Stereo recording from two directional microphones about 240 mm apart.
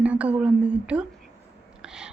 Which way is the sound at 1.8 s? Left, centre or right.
Centre.